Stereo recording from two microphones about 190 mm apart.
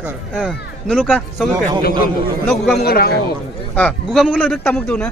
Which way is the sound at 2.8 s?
55° left (ahead or behind).